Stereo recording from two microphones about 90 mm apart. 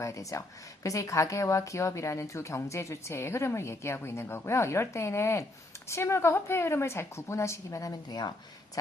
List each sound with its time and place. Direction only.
0.0 s a woman's voice: 35° left (ahead or behind)